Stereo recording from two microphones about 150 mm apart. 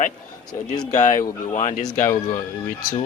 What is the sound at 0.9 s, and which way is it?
Speech, 60° left (ahead or behind).